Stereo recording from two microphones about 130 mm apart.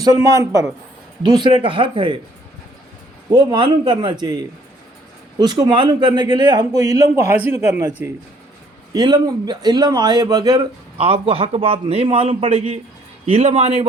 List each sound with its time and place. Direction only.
0.0 s a man's voice: 30° right (ahead or behind)
3.2 s a man's voice: 35° right (ahead or behind)
10.9 s a man's voice: 50° right (ahead or behind)